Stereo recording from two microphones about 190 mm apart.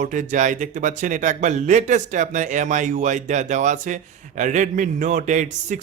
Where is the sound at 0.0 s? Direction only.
40° right (ahead or behind).